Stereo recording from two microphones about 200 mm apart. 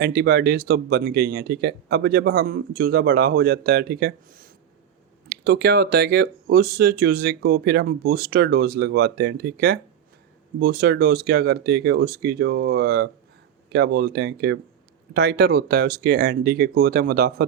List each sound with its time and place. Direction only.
0.0 s speech: 55° right (ahead or behind)